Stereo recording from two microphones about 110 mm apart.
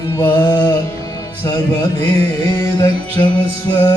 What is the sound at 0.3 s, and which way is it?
Music, 40° left (ahead or behind).